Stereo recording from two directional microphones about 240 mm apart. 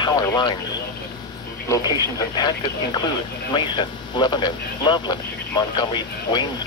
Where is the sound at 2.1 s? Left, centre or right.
Centre.